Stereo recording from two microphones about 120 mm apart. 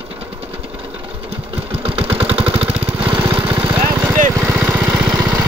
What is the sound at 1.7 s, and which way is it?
Engine, 55° right (ahead or behind).